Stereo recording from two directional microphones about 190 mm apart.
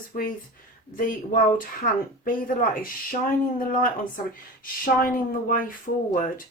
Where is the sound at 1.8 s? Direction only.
45° left (ahead or behind).